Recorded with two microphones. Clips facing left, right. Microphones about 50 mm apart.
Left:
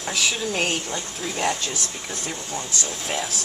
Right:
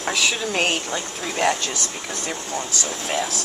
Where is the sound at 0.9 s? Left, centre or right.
Right.